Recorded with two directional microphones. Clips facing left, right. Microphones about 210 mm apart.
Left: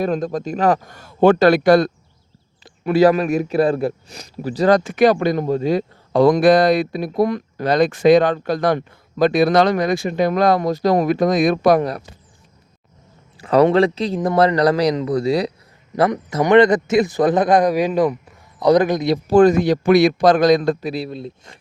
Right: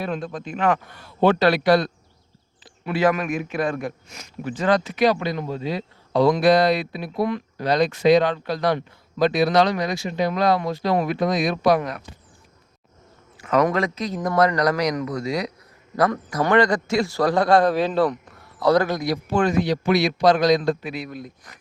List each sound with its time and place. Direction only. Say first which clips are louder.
0.0 s a man's voice: left 7 dB; 40° left (ahead or behind)
11.8 s speech: left 7 dB; 35° left (ahead or behind)
13.4 s a man's voice: left 7 dB; 30° left (ahead or behind)
19.3 s a man's voice: left 9 dB; 40° left (ahead or behind)
20.9 s a man's voice: left 6 dB; 30° left (ahead or behind)